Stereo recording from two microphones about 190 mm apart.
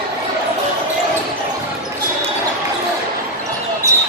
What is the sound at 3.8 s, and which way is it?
Basketball bounce, 15° right (ahead or behind).